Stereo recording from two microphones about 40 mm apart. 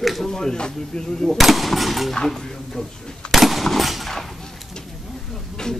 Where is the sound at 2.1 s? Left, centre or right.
Centre.